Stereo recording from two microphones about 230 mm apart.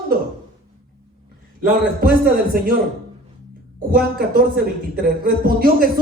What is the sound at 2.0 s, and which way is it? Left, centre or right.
Speech, right.